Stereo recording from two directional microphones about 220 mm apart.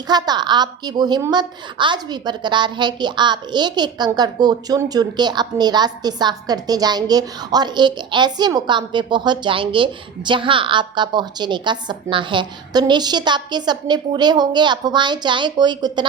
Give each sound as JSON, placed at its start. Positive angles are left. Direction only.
{"t": 0.1, "sound": "a woman's voice", "side_deg": -20}